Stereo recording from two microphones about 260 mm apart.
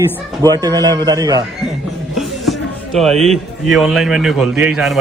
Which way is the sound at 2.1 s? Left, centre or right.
Centre.